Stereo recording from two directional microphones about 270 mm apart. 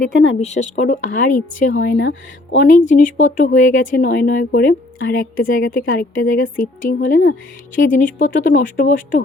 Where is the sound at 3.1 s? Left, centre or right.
Left.